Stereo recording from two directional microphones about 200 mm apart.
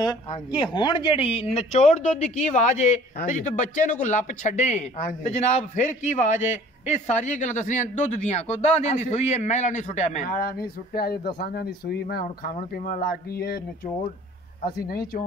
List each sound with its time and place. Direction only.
0.3 s speech: 25° left (ahead or behind); by 13.6 s 50° left (ahead or behind)
14.6 s speech: 50° left (ahead or behind)